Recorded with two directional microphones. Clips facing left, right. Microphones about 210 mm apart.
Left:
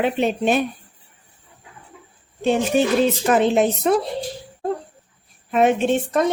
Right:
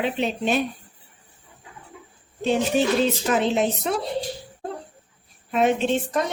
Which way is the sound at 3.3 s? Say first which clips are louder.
Left 4 dB; 55° left (ahead or behind).